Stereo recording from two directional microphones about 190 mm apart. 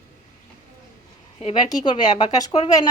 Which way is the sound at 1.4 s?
25° left (ahead or behind).